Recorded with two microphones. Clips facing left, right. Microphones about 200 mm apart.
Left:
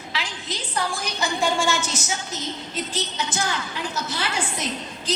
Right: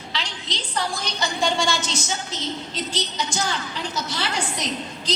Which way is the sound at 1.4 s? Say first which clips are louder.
Even; 5° left (ahead or behind).